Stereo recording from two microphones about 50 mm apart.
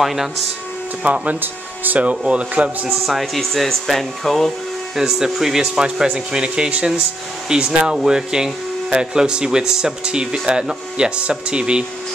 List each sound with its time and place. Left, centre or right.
0.0 s speech: centre
1.0 s speech: right
1.4 s speech: right
2.0 s speech: right
3.1 s speech: centre
4.9 s speech: centre